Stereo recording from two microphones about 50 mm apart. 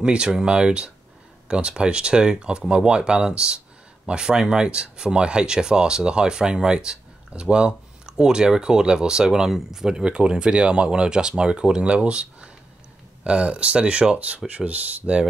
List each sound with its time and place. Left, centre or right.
0.0 s speech: centre